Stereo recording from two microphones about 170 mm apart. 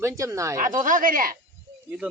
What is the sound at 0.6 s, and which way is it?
Speech, 50° right (ahead or behind).